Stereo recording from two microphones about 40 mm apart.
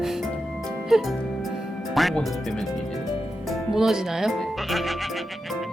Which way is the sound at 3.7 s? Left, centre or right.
Centre.